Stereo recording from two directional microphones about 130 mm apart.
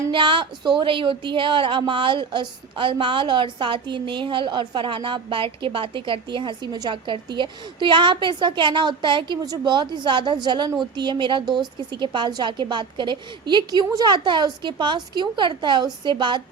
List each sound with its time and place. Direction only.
0.1 s a woman's voice: 40° right (ahead or behind)